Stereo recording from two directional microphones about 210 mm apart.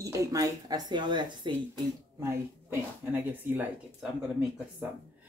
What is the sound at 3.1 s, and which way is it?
Speech, 10° right (ahead or behind).